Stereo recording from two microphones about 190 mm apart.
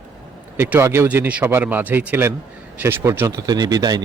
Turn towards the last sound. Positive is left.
turn(degrees=-20)  # may be behind; listen again after turning